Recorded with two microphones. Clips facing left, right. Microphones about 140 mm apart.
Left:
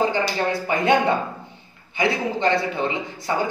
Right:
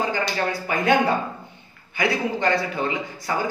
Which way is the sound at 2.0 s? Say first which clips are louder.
Left 1 dB; 25° left (ahead or behind).